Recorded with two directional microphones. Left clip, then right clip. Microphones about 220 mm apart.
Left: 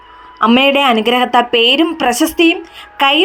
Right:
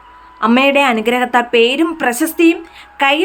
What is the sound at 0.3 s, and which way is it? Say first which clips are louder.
A woman's voice: left 1 dB; 10° left (ahead or behind).